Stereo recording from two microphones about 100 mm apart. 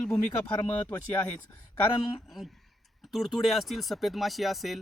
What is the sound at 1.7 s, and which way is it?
Speech, 55° left (ahead or behind).